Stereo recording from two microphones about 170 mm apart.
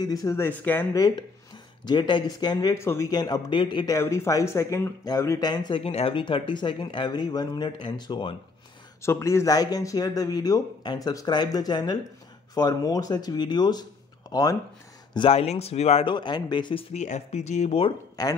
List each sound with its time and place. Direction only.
0.0 s speech: 20° left (ahead or behind)
9.0 s speech: 15° left (ahead or behind)
15.1 s speech: 35° left (ahead or behind)
16.9 s speech: 45° left (ahead or behind)
18.2 s speech: 25° left (ahead or behind)